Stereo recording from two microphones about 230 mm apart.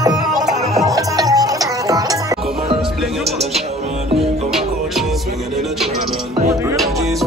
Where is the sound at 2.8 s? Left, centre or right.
Centre.